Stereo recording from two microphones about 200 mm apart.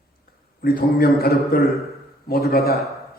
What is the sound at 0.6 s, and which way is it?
A man's voice, 50° left (ahead or behind).